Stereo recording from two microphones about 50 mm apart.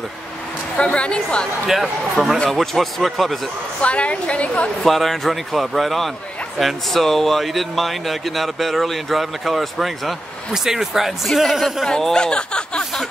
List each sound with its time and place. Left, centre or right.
0.7 s a woman's voice: left
1.7 s speech: centre
3.8 s a woman's voice: left
4.8 s speech: centre
11.9 s a sound: centre